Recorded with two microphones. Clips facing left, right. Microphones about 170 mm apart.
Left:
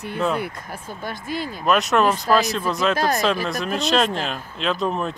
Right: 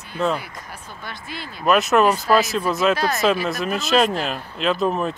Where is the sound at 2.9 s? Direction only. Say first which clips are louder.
Left 1 dB; 45° left (ahead or behind).